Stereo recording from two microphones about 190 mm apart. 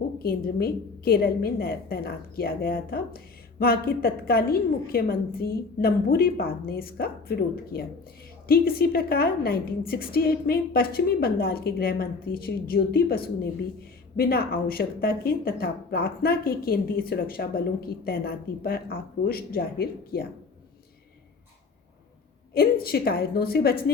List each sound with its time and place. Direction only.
0.2 s a woman's voice: 50° left (ahead or behind)
22.5 s a woman's voice: 55° left (ahead or behind)